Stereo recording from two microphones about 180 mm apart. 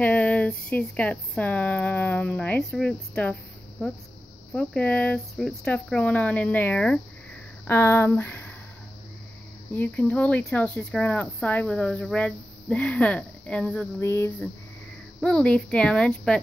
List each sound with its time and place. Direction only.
0.0 s speech: 10° left (ahead or behind)
4.6 s speech: 5° left (ahead or behind)
9.8 s speech: 10° left (ahead or behind)